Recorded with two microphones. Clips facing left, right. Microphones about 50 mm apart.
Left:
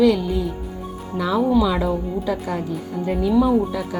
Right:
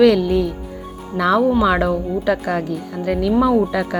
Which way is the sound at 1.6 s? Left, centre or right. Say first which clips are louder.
Right 4 dB; right.